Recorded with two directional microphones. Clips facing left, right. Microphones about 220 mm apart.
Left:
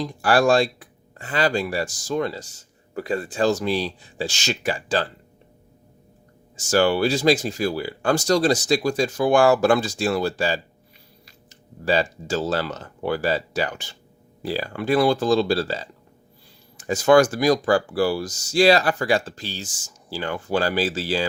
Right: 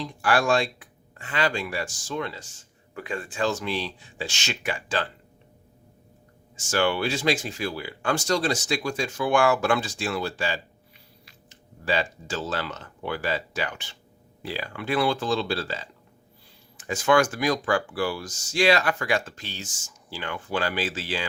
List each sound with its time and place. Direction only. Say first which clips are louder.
0.0 s speech: left 5 dB; 40° left (ahead or behind)
6.7 s speech: left 6 dB; 40° left (ahead or behind)